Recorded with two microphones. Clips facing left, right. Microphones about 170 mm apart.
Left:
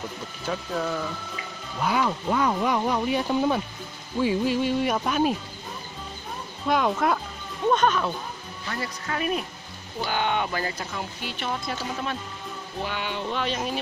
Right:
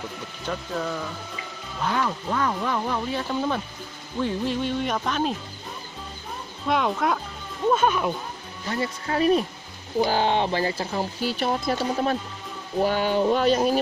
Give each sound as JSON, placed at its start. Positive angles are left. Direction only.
{"t": 0.5, "sound": "speech", "side_deg": 5}
{"t": 6.7, "sound": "speech", "side_deg": 0}
{"t": 8.6, "sound": "speech", "side_deg": -25}